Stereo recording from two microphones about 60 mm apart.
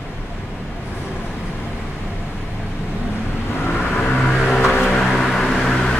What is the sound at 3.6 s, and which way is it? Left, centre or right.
Vehicle, left.